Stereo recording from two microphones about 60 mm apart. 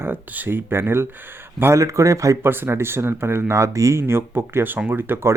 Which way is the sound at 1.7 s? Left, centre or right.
Right.